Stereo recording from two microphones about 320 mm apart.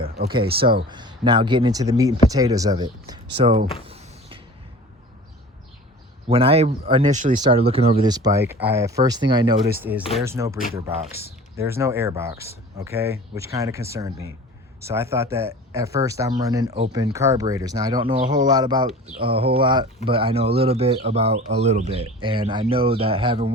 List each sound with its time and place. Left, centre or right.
0.3 s speech: centre
3.8 s creak: centre
6.2 s speech: centre